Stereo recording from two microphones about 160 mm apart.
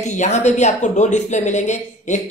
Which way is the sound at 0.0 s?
45° left (ahead or behind).